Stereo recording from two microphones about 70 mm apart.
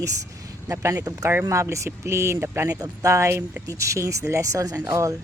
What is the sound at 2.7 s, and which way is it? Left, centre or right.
Speech, right.